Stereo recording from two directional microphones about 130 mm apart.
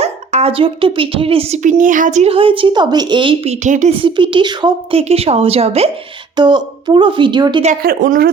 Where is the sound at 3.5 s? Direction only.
70° right (ahead or behind).